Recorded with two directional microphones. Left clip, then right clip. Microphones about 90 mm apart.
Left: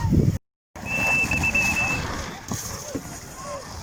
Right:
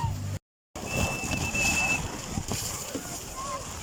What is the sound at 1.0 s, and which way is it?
Vehicle, 20° right (ahead or behind).